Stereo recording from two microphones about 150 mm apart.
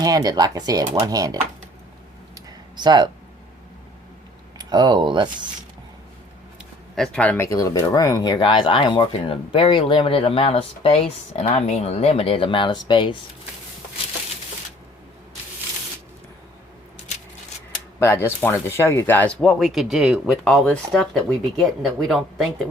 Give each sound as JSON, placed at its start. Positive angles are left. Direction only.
{"t": 0.0, "sound": "speech", "side_deg": -25}
{"t": 2.7, "sound": "speech", "side_deg": -30}
{"t": 4.5, "sound": "speech", "side_deg": -30}
{"t": 6.9, "sound": "speech", "side_deg": 5}
{"t": 7.4, "sound": "speech", "side_deg": 20}
{"t": 18.0, "sound": "speech", "side_deg": 15}